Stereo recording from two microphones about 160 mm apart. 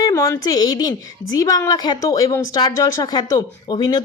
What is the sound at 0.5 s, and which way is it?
Speech, 25° left (ahead or behind).